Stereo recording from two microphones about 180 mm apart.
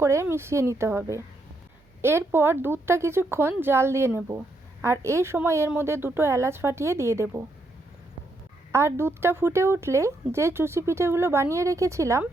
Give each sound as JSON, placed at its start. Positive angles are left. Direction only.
{"t": 0.0, "sound": "a woman's voice", "side_deg": -15}
{"t": 8.7, "sound": "a woman's voice", "side_deg": -15}